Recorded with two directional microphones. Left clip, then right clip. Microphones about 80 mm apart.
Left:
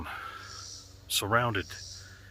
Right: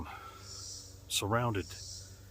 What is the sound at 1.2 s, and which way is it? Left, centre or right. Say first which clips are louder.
Speech: left 6 dB; right.